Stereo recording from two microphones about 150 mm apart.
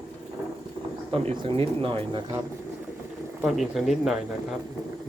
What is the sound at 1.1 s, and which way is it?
Speech, 35° right (ahead or behind).